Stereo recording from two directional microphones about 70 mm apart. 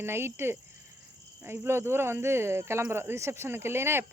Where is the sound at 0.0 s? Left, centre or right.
Right.